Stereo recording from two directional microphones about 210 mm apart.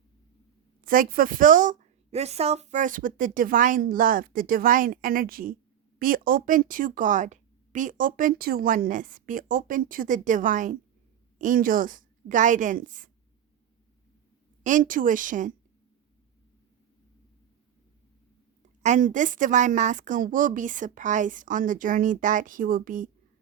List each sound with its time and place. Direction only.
0.9 s speech: 40° right (ahead or behind)
14.6 s speech: 40° right (ahead or behind)
18.8 s speech: 35° right (ahead or behind)